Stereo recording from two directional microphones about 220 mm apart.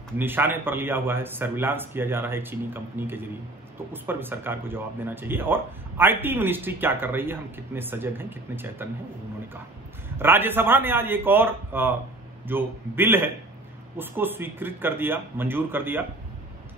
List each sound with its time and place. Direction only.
0.2 s speech: 10° right (ahead or behind)
10.0 s speech: 10° right (ahead or behind)